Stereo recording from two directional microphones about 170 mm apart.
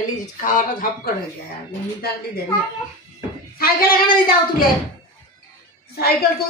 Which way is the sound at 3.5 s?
60° left (ahead or behind).